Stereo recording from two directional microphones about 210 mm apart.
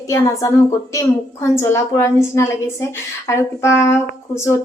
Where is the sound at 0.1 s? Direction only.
15° left (ahead or behind).